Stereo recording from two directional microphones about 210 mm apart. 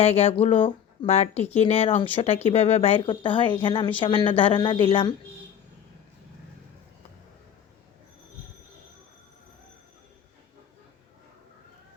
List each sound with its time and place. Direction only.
0.0 s speech: 30° left (ahead or behind)